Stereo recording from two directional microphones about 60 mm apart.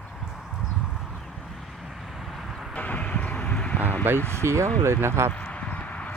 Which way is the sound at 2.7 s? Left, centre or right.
Left.